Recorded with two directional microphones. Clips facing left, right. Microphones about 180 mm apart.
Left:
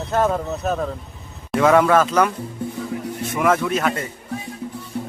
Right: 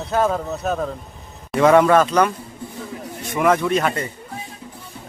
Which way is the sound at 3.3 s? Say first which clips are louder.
Right 2 dB; centre (ahead or behind).